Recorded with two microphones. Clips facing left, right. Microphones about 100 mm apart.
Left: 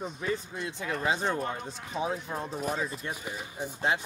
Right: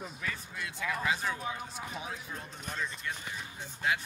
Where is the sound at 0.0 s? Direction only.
30° left (ahead or behind).